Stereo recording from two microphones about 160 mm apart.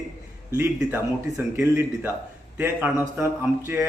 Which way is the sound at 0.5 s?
15° right (ahead or behind).